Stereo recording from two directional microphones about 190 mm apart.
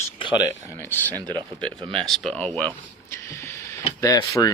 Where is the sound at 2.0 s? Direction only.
Centre (ahead or behind).